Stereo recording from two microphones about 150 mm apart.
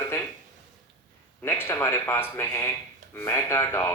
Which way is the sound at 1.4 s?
15° left (ahead or behind).